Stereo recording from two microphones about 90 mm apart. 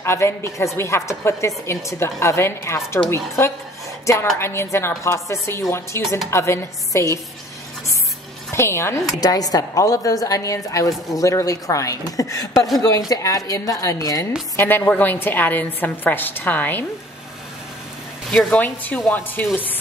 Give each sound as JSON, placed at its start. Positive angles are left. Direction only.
{"t": 0.0, "sound": "a woman's voice", "side_deg": 30}
{"t": 8.5, "sound": "speech", "side_deg": 30}
{"t": 9.2, "sound": "a woman's voice", "side_deg": 45}
{"t": 14.6, "sound": "a woman's voice", "side_deg": 20}
{"t": 18.5, "sound": "a woman's voice", "side_deg": 15}